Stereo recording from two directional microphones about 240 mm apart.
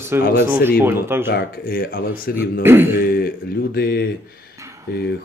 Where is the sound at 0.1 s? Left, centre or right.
Centre.